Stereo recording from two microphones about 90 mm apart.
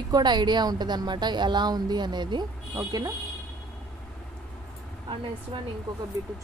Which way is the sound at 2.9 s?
45° right (ahead or behind).